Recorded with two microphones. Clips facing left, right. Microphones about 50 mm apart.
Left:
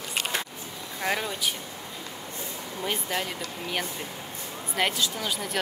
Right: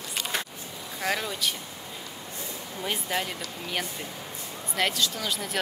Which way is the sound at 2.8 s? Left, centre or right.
Centre.